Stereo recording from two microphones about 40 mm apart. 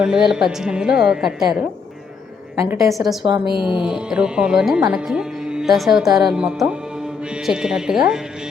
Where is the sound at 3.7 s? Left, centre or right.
Centre.